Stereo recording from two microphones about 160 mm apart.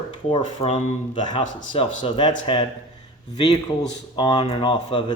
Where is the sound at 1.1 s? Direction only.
30° left (ahead or behind).